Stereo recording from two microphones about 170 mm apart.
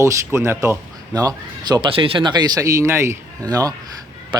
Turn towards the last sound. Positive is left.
turn(degrees=-20)  # may be behind; listen again after turning